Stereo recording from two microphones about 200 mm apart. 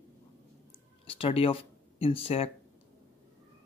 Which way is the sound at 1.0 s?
30° left (ahead or behind).